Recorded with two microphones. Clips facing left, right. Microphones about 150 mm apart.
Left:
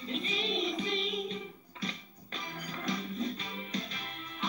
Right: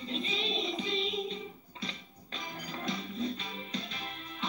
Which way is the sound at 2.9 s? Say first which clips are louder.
Left 1 dB; 30° right (ahead or behind).